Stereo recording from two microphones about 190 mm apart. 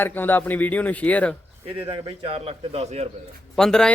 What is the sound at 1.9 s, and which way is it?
A man's voice, 30° right (ahead or behind).